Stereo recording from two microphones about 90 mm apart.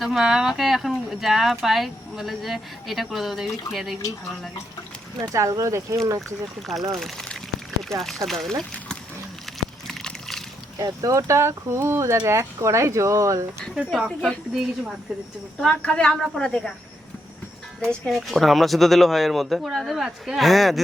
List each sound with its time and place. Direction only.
0.0 s speech: centre (ahead or behind)
5.3 s speech: 35° right (ahead or behind)
6.2 s speech: centre (ahead or behind)
9.5 s a sound: centre (ahead or behind)
9.8 s water: 5° left (ahead or behind)
10.8 s speech: 40° right (ahead or behind)
13.7 s a woman's voice: 10° right (ahead or behind)
17.8 s speech: 5° left (ahead or behind)